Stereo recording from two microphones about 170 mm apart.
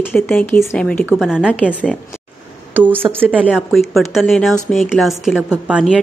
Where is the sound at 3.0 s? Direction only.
10° right (ahead or behind).